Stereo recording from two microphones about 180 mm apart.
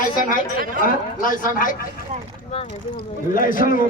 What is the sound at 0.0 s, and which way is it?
A man's voice, 50° left (ahead or behind).